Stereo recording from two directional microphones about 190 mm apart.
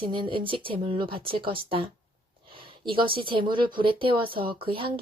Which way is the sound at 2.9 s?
25° right (ahead or behind).